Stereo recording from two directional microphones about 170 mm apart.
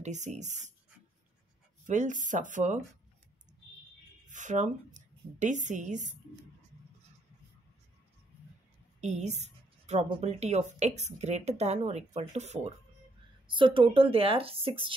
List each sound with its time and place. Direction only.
0.0 s speech: 45° right (ahead or behind)
1.9 s speech: 45° right (ahead or behind)
4.3 s a woman's voice: 45° right (ahead or behind)
9.0 s a woman's voice: 45° right (ahead or behind)
13.5 s speech: 30° right (ahead or behind)